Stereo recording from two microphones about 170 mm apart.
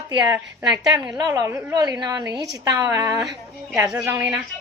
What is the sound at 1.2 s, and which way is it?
A woman's voice, 20° right (ahead or behind).